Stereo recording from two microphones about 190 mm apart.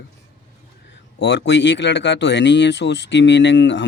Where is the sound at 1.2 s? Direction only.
70° left (ahead or behind).